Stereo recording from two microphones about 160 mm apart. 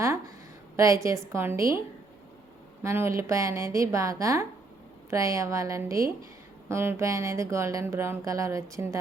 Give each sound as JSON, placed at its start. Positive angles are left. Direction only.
{"t": 0.8, "sound": "speech", "side_deg": -20}
{"t": 2.8, "sound": "speech", "side_deg": -15}